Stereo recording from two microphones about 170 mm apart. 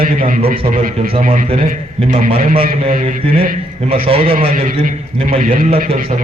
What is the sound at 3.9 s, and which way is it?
Speech, 35° right (ahead or behind).